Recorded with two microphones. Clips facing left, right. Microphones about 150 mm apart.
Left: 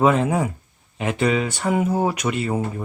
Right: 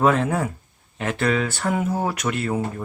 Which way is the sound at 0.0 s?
10° left (ahead or behind).